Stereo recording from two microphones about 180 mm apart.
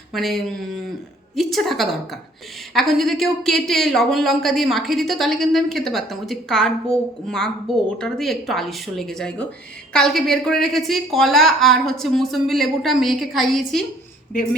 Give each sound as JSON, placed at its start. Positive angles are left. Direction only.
{"t": 0.1, "sound": "a woman's voice", "side_deg": 0}